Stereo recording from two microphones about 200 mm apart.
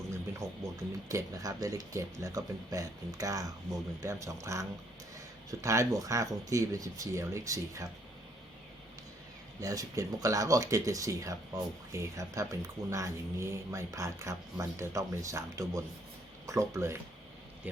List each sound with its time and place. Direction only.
0.6 s speech: 15° right (ahead or behind)
9.6 s speech: 15° right (ahead or behind)